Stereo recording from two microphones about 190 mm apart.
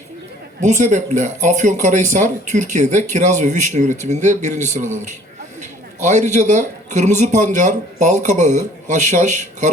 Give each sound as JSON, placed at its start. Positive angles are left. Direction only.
{"t": 0.6, "sound": "a man's voice", "side_deg": -40}
{"t": 6.0, "sound": "a man's voice", "side_deg": -40}